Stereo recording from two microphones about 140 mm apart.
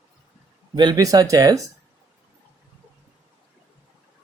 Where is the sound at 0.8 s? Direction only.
30° right (ahead or behind).